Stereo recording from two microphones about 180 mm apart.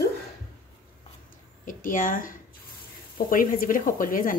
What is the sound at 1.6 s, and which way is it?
A woman's voice, 50° left (ahead or behind).